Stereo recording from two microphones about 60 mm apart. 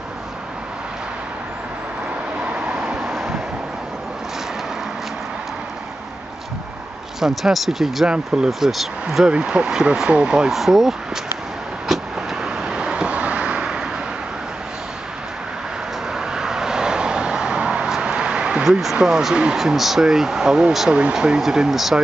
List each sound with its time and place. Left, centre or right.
2.4 s vehicle: right
3.1 s wind: centre
7.2 s speech: centre
11.9 s vehicle: centre
16.2 s vehicle: centre
18.7 s speech: centre